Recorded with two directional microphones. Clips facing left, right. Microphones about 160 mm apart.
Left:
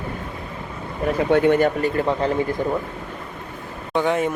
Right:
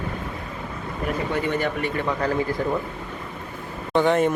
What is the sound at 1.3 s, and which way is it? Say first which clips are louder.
Speech: left 11 dB; 65° left (ahead or behind).